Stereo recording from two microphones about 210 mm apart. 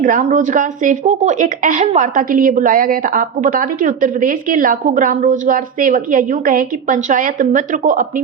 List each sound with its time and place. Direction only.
0.0 s speech: 40° right (ahead or behind)